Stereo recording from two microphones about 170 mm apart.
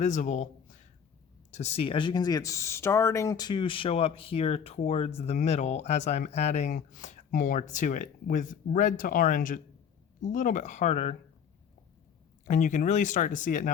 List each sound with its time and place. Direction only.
0.0 s speech: 45° left (ahead or behind)
12.5 s speech: 50° left (ahead or behind)